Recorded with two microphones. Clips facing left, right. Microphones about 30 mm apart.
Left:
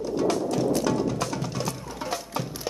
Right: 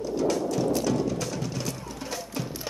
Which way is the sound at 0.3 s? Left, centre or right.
Left.